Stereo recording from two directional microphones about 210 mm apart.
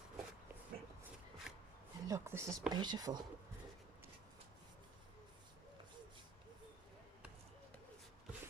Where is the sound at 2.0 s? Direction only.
15° right (ahead or behind).